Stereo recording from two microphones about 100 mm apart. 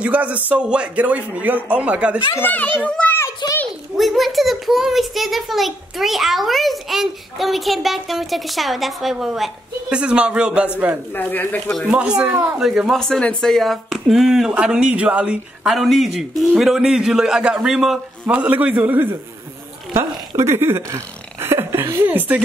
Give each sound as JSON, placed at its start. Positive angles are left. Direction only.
{"t": 0.0, "sound": "a man's voice", "side_deg": -15}
{"t": 2.3, "sound": "a child's voice", "side_deg": 15}
{"t": 3.4, "sound": "a child's voice", "side_deg": 45}
{"t": 3.9, "sound": "a child's voice", "side_deg": 0}
{"t": 11.1, "sound": "a child's voice", "side_deg": 20}
{"t": 12.4, "sound": "a child's voice", "side_deg": -5}
{"t": 13.0, "sound": "a child's voice", "side_deg": 10}
{"t": 18.2, "sound": "a man's voice", "side_deg": -15}
{"t": 19.9, "sound": "a sound", "side_deg": -25}
{"t": 22.0, "sound": "a man's voice", "side_deg": -15}